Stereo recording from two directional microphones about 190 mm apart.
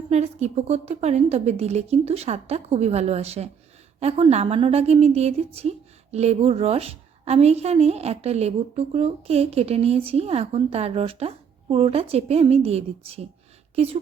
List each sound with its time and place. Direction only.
0.1 s a woman's voice: 35° right (ahead or behind)